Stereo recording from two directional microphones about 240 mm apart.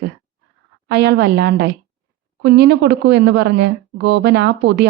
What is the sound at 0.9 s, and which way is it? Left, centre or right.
A woman's voice, right.